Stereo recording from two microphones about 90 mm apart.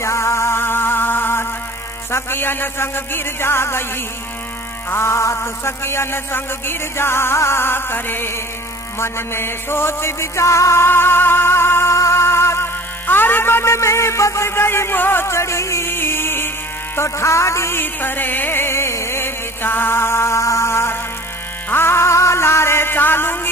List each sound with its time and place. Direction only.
0.0 s music: 30° left (ahead or behind)